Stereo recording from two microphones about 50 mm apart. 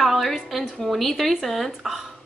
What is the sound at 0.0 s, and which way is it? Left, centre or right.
A woman's voice, centre.